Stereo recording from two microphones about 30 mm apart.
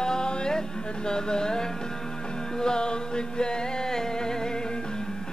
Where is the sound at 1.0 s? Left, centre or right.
Left.